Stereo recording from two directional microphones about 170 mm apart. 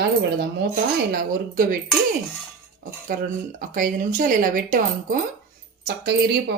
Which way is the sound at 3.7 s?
55° right (ahead or behind).